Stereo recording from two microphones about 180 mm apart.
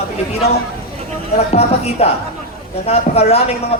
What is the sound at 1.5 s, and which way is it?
Speech, 35° left (ahead or behind).